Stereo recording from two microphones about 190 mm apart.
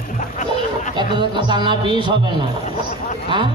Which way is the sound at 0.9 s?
25° right (ahead or behind).